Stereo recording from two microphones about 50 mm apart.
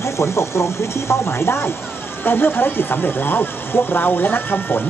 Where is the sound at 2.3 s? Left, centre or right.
Left.